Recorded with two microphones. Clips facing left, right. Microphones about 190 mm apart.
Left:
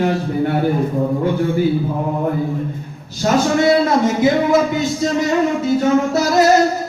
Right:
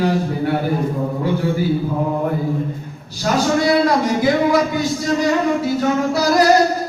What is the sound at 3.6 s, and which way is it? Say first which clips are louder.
Speech: left 2 dB; 25° left (ahead or behind).